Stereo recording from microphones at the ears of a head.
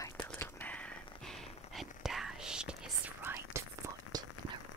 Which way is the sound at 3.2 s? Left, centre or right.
Right.